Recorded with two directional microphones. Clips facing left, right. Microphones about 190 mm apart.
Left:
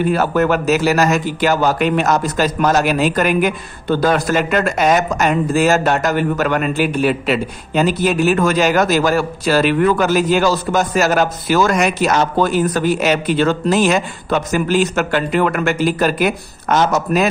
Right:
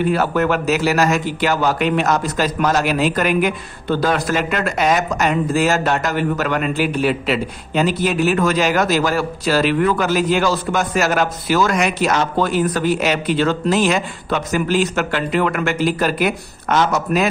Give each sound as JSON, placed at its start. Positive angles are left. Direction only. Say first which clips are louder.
{"t": 0.1, "sound": "speech", "louder": "left 2 dB", "side_deg": 45}